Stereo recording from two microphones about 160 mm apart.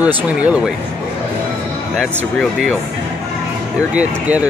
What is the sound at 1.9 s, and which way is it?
Speech, centre (ahead or behind).